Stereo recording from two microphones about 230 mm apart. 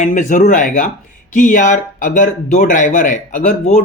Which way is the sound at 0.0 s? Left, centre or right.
Left.